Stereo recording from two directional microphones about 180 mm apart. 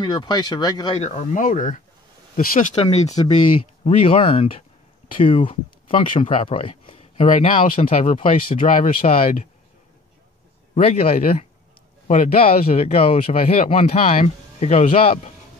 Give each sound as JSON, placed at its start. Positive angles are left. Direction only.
{"t": 0.0, "sound": "speech", "side_deg": 25}
{"t": 0.9, "sound": "speech", "side_deg": 35}
{"t": 2.7, "sound": "speech", "side_deg": 35}
{"t": 3.1, "sound": "speech", "side_deg": 25}
{"t": 7.8, "sound": "speech", "side_deg": 35}
{"t": 10.7, "sound": "speech", "side_deg": 35}